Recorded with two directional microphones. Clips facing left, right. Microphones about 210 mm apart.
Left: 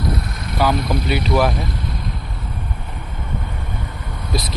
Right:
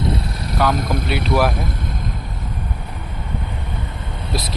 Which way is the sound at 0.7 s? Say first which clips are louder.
Left 1 dB; 50° right (ahead or behind).